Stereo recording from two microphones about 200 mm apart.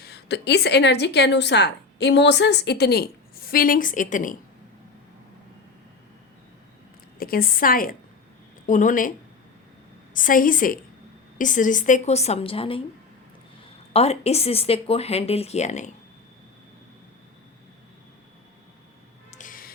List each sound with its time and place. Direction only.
0.0 s a woman's voice: 55° left (ahead or behind); by 4.4 s 40° left (ahead or behind)
7.2 s a woman's voice: 45° left (ahead or behind)
10.2 s a woman's voice: 45° left (ahead or behind); by 12.8 s 25° left (ahead or behind)
13.9 s speech: 30° left (ahead or behind)
19.3 s music: 40° left (ahead or behind)